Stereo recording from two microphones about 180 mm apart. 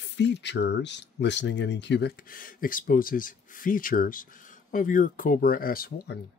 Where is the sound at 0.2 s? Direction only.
75° left (ahead or behind).